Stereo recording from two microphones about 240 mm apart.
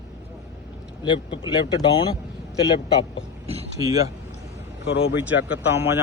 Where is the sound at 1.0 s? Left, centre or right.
Left.